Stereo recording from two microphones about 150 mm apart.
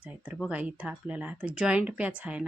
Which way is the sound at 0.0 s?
10° right (ahead or behind).